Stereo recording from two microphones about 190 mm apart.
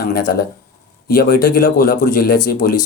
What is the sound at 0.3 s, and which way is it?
Speech, 50° left (ahead or behind).